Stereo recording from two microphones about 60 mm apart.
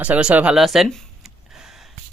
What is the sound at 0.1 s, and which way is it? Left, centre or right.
Speech, right.